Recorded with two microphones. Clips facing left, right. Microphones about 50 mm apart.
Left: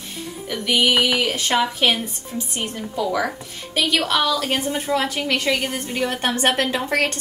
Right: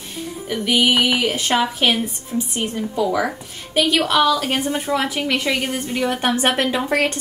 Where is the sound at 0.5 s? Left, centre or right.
Centre.